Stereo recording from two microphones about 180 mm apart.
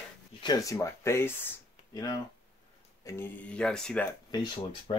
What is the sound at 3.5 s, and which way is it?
Speech, 5° left (ahead or behind).